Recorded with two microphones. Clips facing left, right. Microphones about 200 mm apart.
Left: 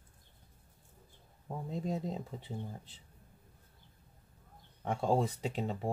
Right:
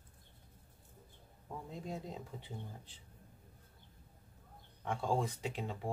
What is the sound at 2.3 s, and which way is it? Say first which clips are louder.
Speech: left 4 dB; 35° left (ahead or behind).